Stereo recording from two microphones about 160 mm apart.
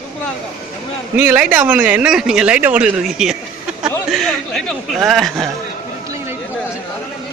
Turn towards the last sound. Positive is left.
turn(degrees=0)  # may be behind; listen again after turning